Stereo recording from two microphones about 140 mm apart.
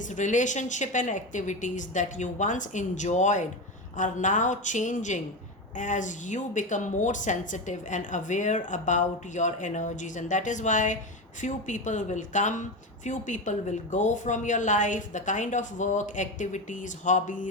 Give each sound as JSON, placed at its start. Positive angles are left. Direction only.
{"t": 0.0, "sound": "a woman's voice", "side_deg": 60}